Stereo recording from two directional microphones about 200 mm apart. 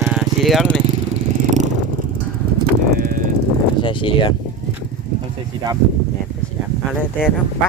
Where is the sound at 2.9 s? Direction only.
55° right (ahead or behind).